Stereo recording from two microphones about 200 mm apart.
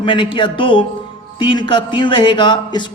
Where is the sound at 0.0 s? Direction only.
25° left (ahead or behind).